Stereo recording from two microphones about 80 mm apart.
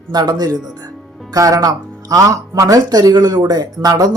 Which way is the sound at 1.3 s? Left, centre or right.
Right.